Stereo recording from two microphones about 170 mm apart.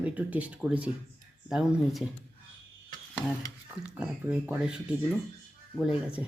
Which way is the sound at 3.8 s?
10° right (ahead or behind).